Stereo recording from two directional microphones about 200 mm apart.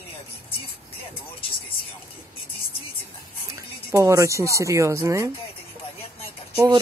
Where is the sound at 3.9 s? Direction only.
15° right (ahead or behind).